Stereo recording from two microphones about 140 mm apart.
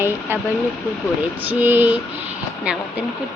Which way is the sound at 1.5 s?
15° right (ahead or behind).